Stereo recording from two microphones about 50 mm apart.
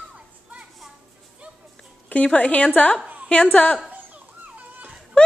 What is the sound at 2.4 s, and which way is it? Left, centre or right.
A woman's voice, left.